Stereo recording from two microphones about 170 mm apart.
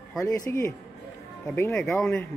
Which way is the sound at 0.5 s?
15° left (ahead or behind).